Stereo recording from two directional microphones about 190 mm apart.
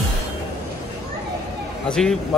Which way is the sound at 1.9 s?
5° left (ahead or behind).